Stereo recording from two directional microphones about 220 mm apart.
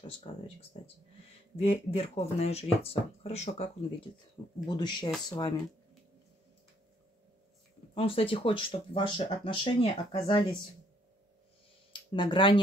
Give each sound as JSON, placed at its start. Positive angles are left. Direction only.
{"t": 0.3, "sound": "speech", "side_deg": 25}
{"t": 1.6, "sound": "speech", "side_deg": 25}
{"t": 7.9, "sound": "speech", "side_deg": 25}
{"t": 11.9, "sound": "speech", "side_deg": 20}